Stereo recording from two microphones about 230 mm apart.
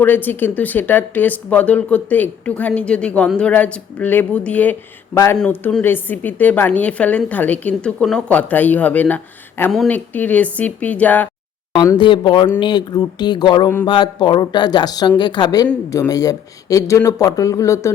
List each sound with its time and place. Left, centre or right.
0.0 s speech: centre
11.8 s speech: centre